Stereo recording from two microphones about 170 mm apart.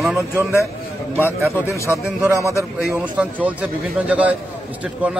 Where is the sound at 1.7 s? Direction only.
15° left (ahead or behind).